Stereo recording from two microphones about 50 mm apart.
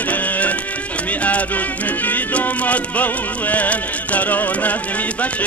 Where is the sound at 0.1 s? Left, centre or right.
Left.